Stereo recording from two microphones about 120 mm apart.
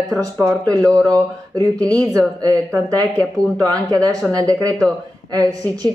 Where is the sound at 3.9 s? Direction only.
30° right (ahead or behind).